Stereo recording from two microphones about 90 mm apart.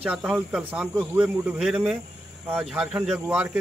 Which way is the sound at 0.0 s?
10° right (ahead or behind).